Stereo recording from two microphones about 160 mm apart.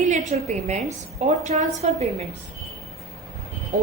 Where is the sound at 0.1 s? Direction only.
45° right (ahead or behind).